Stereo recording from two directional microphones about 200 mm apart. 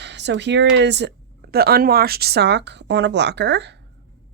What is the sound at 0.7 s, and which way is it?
Speech, 60° right (ahead or behind).